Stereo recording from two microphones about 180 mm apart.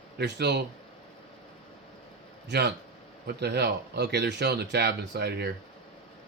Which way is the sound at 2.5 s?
70° right (ahead or behind).